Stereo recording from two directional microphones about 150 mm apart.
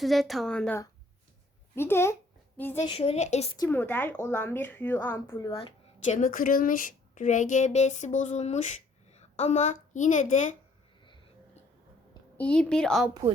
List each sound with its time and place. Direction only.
0.0 s a woman's voice: centre (ahead or behind)
1.7 s a woman's voice: 15° left (ahead or behind)
2.8 s a woman's voice: 40° left (ahead or behind)
3.7 s a woman's voice: 15° left (ahead or behind)
5.5 s speech: 40° left (ahead or behind)
6.1 s speech: 60° left (ahead or behind)
12.4 s a woman's voice: 5° left (ahead or behind)